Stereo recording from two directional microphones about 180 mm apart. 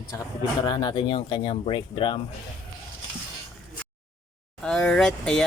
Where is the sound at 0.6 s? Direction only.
25° left (ahead or behind).